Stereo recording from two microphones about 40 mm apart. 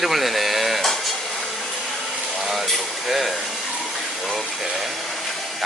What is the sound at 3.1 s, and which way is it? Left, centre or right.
Speech, centre.